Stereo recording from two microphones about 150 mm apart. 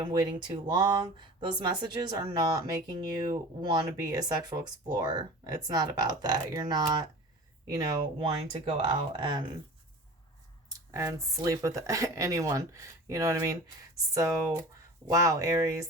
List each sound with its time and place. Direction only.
0.0 s speech: 30° right (ahead or behind)
8.3 s speech: 35° right (ahead or behind)
10.7 s speech: 20° right (ahead or behind)